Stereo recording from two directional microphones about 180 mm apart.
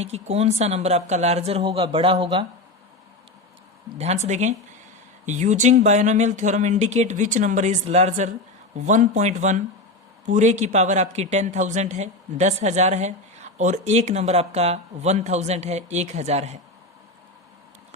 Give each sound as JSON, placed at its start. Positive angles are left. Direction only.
{"t": 0.0, "sound": "speech", "side_deg": -35}
{"t": 3.9, "sound": "speech", "side_deg": -35}